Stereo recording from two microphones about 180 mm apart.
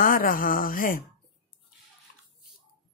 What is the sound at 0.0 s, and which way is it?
Speech, 50° left (ahead or behind).